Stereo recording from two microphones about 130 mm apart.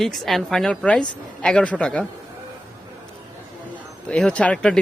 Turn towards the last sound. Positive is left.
turn(degrees=5)  # may be behind; listen again after turning